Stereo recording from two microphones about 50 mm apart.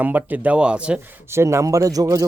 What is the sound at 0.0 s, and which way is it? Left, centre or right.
Speech, right.